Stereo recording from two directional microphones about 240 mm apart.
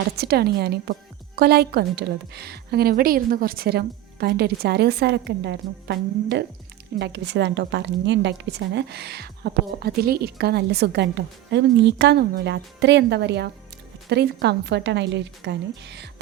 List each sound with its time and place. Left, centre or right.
0.2 s a woman's voice: right